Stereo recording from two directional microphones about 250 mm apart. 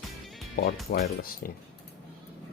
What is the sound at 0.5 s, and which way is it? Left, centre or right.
Speech, left.